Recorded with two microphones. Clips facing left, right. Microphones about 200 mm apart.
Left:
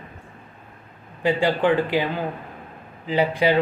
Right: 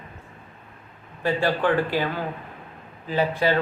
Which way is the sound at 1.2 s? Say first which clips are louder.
Left 3 dB; 15° left (ahead or behind).